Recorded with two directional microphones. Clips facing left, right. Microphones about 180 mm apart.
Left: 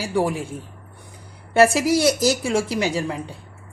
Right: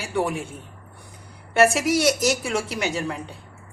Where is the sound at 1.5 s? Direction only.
30° left (ahead or behind).